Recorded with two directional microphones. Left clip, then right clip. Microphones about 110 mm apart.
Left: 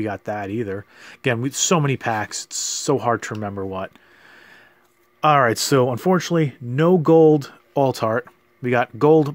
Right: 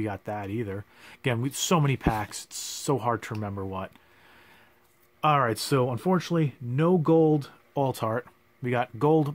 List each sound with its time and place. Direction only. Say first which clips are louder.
0.0 s speech: left 7 dB; 35° left (ahead or behind)